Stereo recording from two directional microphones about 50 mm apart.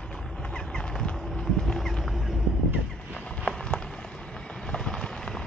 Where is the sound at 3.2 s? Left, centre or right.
Centre.